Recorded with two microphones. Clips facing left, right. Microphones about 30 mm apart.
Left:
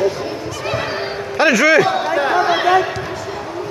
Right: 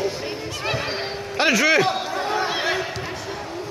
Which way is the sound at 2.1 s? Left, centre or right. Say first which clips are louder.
Left 8 dB; left.